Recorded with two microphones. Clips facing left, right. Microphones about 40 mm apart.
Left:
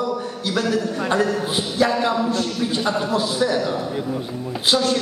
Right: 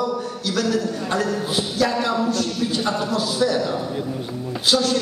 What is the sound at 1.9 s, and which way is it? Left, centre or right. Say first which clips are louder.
A man's voice: left 1 dB; centre.